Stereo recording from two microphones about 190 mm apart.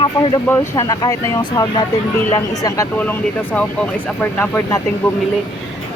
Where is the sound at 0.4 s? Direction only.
15° left (ahead or behind).